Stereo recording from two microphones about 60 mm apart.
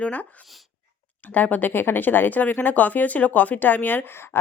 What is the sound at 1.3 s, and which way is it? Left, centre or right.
Speech, left.